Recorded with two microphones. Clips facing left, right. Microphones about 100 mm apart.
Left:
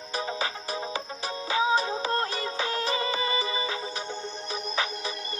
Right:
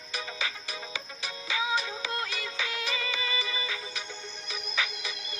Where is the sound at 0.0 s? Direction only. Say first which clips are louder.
Left 6 dB; 35° left (ahead or behind).